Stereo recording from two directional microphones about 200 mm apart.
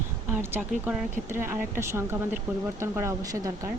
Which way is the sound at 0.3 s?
10° right (ahead or behind).